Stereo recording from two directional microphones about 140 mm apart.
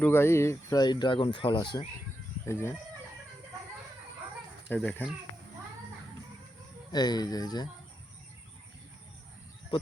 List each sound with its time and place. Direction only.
0.0 s speech: 15° left (ahead or behind); by 1.9 s 35° left (ahead or behind)
2.5 s speech: 20° left (ahead or behind)
4.7 s speech: 10° left (ahead or behind)
6.9 s speech: 30° left (ahead or behind)